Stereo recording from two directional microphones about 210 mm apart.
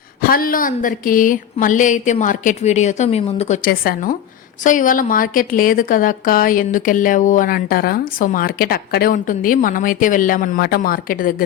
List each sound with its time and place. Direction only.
0.2 s a woman's voice: 45° left (ahead or behind)